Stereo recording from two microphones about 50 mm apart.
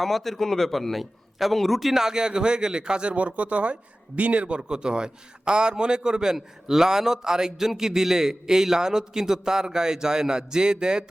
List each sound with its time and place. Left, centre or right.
0.0 s a man's voice: centre